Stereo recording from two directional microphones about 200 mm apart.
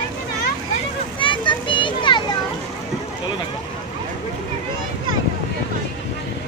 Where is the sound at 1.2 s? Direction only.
25° left (ahead or behind).